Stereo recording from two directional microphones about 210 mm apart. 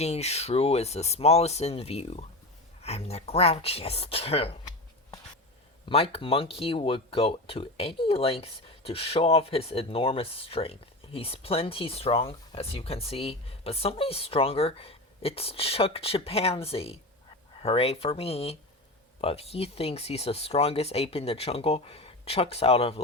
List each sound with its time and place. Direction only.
0.0 s speech: 30° left (ahead or behind)
5.9 s speech: 30° left (ahead or behind)